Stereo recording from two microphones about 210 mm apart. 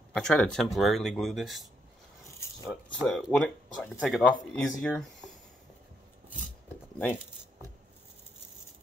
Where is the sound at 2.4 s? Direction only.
15° left (ahead or behind).